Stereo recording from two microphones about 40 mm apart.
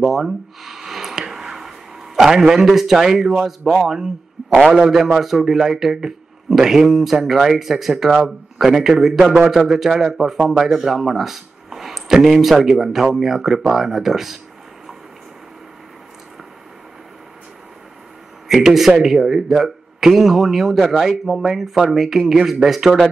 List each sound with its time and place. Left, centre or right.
0.0 s speech: centre
1.2 s a sound: centre
2.1 s a man's voice: centre
4.4 s a man's voice: centre
18.5 s a man's voice: centre